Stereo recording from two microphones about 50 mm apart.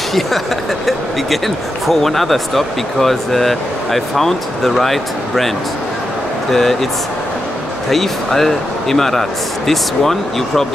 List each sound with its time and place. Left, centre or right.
1.9 s speech: centre
6.5 s speech: centre
7.9 s speech: centre